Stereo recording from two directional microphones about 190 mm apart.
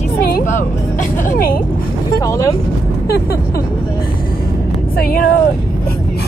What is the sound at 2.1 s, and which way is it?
Vehicle, 20° left (ahead or behind).